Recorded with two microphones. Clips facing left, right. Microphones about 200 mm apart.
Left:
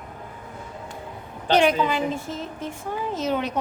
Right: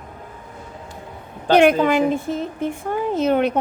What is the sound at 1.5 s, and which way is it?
A woman's voice, 55° right (ahead or behind).